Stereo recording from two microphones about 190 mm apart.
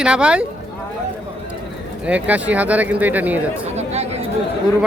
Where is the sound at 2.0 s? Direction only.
5° right (ahead or behind).